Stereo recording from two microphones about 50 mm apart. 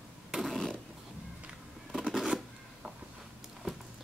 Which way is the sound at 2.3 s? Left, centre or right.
Centre.